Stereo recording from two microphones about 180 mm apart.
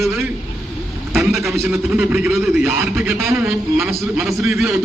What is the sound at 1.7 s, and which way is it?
A man's voice, 5° right (ahead or behind).